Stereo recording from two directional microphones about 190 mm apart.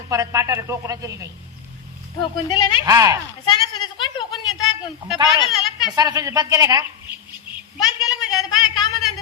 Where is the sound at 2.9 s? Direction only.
15° right (ahead or behind).